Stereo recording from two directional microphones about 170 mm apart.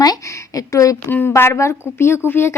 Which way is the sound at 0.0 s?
20° left (ahead or behind).